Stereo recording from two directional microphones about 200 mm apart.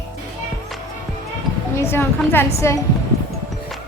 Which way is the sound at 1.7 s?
10° left (ahead or behind).